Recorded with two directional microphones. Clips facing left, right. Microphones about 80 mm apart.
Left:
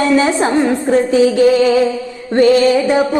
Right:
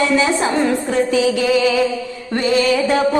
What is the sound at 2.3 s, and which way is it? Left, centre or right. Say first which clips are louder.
Music: left 6 dB; left.